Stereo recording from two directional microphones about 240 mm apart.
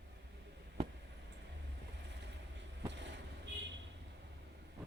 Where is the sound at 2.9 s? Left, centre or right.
Right.